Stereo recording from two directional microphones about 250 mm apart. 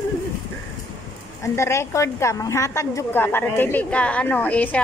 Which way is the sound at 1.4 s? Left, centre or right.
Centre.